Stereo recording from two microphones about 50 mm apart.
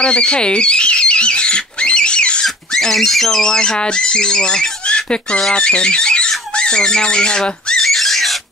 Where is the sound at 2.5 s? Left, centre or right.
Centre.